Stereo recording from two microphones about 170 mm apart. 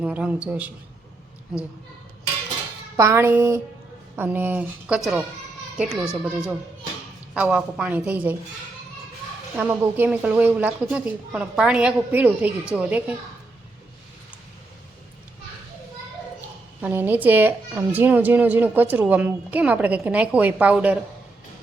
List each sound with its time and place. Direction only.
0.0 s a woman's voice: 5° right (ahead or behind)
2.9 s a woman's voice: 15° right (ahead or behind)
7.3 s a woman's voice: 5° right (ahead or behind)
9.6 s a woman's voice: 10° right (ahead or behind)
16.8 s a woman's voice: 10° right (ahead or behind)